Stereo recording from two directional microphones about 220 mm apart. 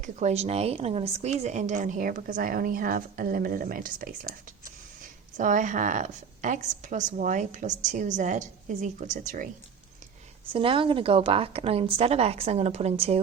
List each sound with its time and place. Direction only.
0.0 s speech: 30° right (ahead or behind)
5.4 s speech: 35° right (ahead or behind)
10.5 s a woman's voice: 25° right (ahead or behind)